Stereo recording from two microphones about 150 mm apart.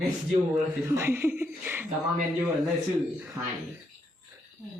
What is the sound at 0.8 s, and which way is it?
A woman's voice, 20° right (ahead or behind).